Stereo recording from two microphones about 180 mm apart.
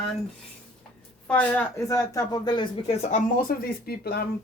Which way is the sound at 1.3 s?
10° left (ahead or behind).